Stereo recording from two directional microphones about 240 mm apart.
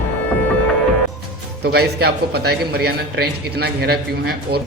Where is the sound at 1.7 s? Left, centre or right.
Right.